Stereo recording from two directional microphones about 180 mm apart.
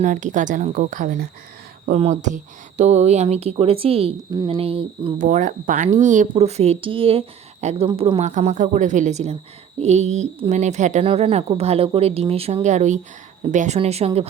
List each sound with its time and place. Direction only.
0.0 s speech: 45° right (ahead or behind)
5.1 s speech: 45° right (ahead or behind)